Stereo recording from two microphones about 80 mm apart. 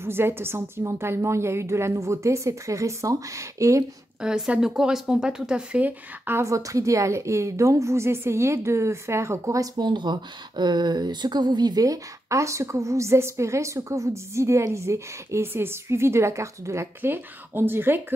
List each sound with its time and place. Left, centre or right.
0.0 s speech: right
4.2 s speech: centre
6.4 s speech: right
9.8 s speech: right